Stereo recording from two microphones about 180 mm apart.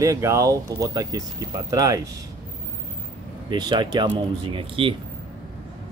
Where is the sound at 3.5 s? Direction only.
25° right (ahead or behind).